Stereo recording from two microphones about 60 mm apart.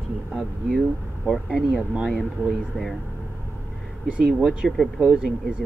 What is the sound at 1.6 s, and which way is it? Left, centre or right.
Speech, centre.